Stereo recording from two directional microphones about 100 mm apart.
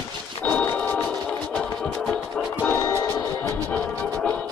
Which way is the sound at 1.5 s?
5° left (ahead or behind).